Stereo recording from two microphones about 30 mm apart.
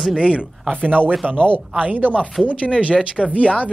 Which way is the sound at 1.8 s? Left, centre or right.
Right.